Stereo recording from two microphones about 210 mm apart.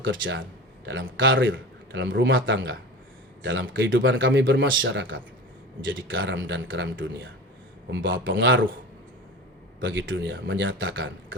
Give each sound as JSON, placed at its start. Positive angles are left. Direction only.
{"t": 0.0, "sound": "a man's voice", "side_deg": -65}
{"t": 9.8, "sound": "a man's voice", "side_deg": -60}